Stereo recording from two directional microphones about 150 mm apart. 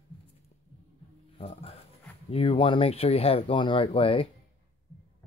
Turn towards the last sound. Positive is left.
turn(degrees=40)  # may be behind; listen again after turning